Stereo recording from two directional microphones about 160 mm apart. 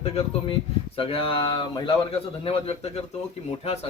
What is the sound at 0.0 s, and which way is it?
A man's voice, 35° left (ahead or behind).